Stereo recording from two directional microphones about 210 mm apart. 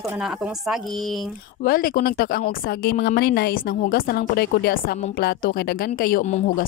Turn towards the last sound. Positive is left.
turn(degrees=35)  # may be behind; listen again after turning